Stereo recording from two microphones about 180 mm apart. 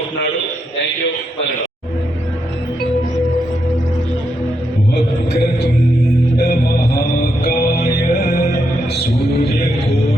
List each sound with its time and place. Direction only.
4.9 s music: 60° left (ahead or behind)